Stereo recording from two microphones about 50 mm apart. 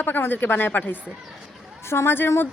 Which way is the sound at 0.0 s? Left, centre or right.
Left.